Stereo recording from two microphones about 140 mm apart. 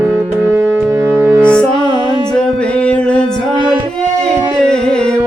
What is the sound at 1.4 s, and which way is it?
Music, 10° left (ahead or behind).